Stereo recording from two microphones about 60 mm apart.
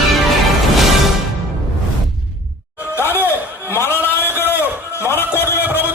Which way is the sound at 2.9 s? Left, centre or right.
Left.